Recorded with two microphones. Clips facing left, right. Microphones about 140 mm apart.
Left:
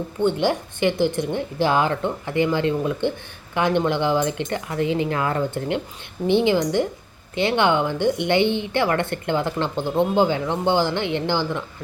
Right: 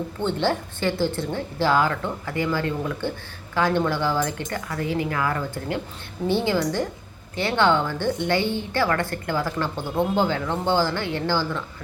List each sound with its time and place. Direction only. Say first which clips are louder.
0.3 s a woman's voice: left 2 dB; 15° left (ahead or behind)